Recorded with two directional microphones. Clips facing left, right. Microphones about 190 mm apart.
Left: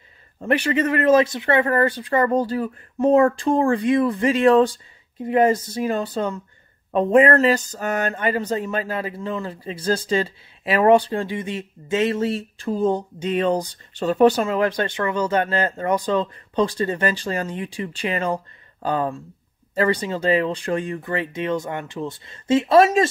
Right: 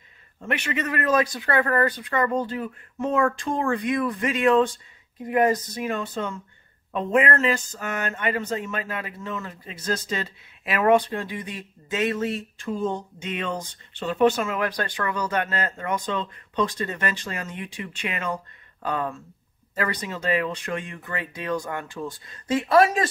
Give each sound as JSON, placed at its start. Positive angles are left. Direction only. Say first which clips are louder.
{"t": 0.4, "sound": "speech", "louder": "left 8 dB", "side_deg": 35}